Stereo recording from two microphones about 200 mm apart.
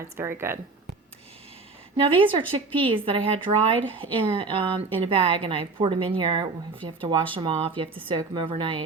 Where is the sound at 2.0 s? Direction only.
25° right (ahead or behind).